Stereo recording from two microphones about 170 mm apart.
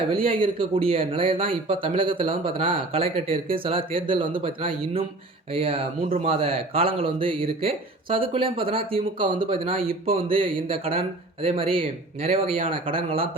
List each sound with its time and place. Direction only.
0.1 s speech: 35° right (ahead or behind)